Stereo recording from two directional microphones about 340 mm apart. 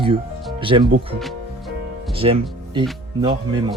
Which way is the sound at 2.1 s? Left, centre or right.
Centre.